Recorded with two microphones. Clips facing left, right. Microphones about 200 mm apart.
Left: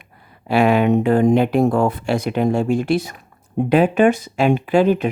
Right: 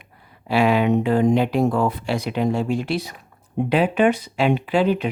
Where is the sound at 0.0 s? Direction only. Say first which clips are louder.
Left 2 dB; 50° left (ahead or behind).